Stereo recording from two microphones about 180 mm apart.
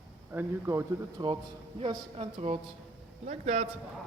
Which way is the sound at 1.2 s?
25° right (ahead or behind).